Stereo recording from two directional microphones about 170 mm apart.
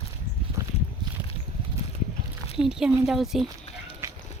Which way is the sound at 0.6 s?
20° right (ahead or behind).